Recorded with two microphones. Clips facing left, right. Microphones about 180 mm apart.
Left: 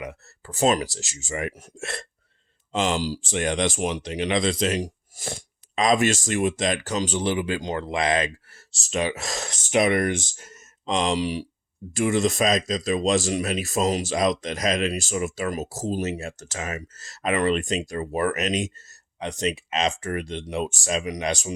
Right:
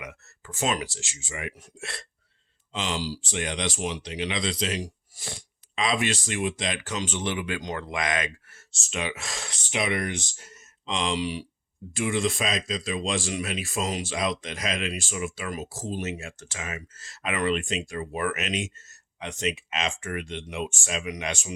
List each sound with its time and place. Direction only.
0.0 s speech: 35° left (ahead or behind)